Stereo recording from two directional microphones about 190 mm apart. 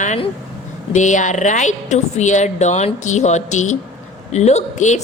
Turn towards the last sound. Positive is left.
turn(degrees=40)  # may be behind; listen again after turning